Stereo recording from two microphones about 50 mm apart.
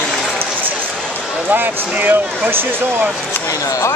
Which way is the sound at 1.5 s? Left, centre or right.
Right.